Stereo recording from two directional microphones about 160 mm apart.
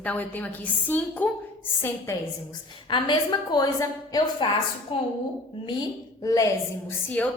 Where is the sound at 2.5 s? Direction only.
30° left (ahead or behind).